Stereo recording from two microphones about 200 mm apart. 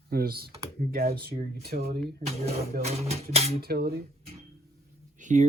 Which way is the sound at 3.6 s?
50° right (ahead or behind).